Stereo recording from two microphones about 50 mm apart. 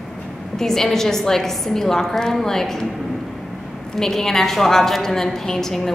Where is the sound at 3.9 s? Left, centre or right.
Centre.